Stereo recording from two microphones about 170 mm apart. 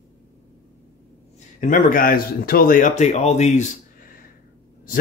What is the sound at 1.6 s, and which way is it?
Speech, 50° left (ahead or behind).